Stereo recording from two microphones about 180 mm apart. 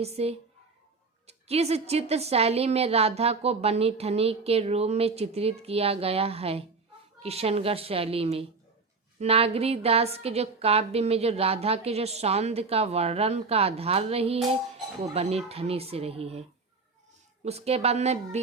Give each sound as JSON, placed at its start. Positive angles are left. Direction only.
{"t": 0.0, "sound": "a woman's voice", "side_deg": -35}
{"t": 17.4, "sound": "a woman's voice", "side_deg": -35}